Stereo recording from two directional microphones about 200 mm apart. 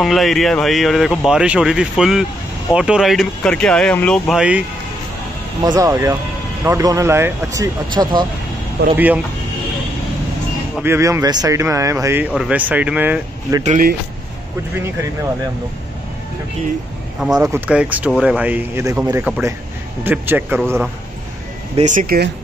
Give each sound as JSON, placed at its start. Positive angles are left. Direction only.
{"t": 0.0, "sound": "speech", "side_deg": 0}
{"t": 5.6, "sound": "speech", "side_deg": -15}
{"t": 8.9, "sound": "speech", "side_deg": -10}
{"t": 10.8, "sound": "speech", "side_deg": -15}
{"t": 13.7, "sound": "speech", "side_deg": -45}
{"t": 17.4, "sound": "speech", "side_deg": -10}
{"t": 21.7, "sound": "speech", "side_deg": -40}